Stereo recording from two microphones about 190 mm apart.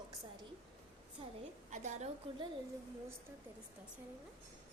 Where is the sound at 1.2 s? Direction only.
30° right (ahead or behind).